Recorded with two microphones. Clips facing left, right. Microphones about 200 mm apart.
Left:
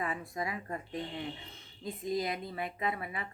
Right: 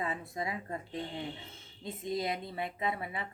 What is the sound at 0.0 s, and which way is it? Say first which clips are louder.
Speech: even; 25° right (ahead or behind).